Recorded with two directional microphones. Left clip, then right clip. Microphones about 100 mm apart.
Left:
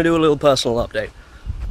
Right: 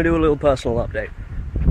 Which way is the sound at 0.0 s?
35° left (ahead or behind).